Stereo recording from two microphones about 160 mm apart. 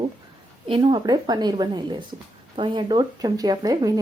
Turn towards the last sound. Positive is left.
turn(degrees=-25)  # may be behind; listen again after turning